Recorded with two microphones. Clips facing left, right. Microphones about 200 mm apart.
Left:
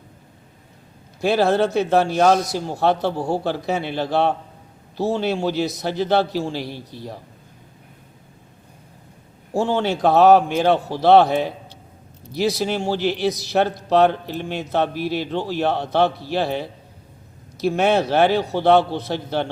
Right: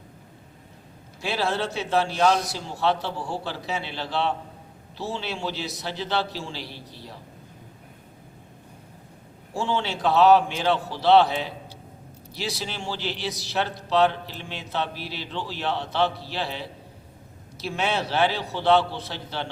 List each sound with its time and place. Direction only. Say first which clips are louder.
1.2 s speech: left 9 dB; 50° left (ahead or behind)
9.5 s speech: left 7 dB; 45° left (ahead or behind)